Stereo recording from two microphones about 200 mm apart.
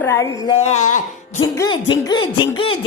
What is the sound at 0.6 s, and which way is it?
Speech, 35° left (ahead or behind).